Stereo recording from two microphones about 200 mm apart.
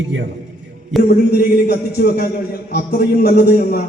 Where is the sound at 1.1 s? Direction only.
55° left (ahead or behind).